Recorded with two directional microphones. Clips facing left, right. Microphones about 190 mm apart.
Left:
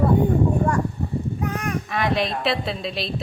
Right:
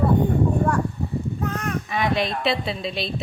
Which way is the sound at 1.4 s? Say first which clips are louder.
Left 1 dB; 15° left (ahead or behind).